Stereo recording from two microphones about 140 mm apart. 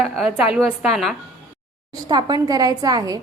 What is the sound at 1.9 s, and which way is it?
A woman's voice, 30° right (ahead or behind).